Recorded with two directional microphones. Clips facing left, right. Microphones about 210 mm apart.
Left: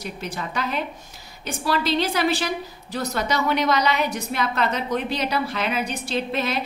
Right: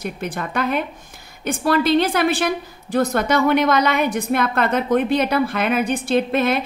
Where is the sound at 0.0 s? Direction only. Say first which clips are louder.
Right 5 dB; 55° right (ahead or behind).